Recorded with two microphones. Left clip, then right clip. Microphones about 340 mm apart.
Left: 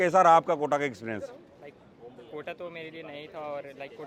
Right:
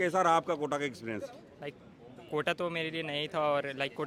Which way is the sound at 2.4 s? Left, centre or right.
Right.